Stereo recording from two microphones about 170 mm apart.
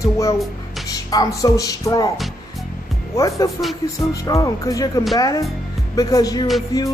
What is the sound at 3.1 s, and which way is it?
Music, 20° left (ahead or behind).